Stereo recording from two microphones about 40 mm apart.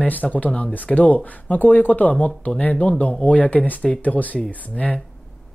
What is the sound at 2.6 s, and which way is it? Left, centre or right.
Speech, left.